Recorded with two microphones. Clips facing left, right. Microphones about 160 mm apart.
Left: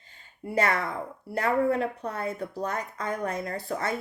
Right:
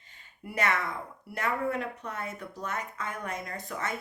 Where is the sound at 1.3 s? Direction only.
35° left (ahead or behind).